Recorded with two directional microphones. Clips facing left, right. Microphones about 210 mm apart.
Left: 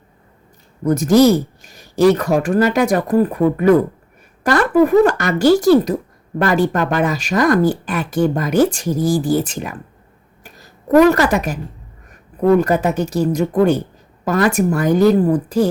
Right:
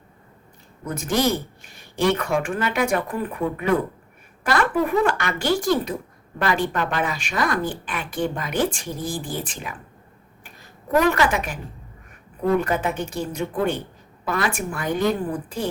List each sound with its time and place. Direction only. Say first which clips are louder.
0.9 s speech: left 11 dB; 40° left (ahead or behind)
4.5 s speech: left 9 dB; 40° left (ahead or behind)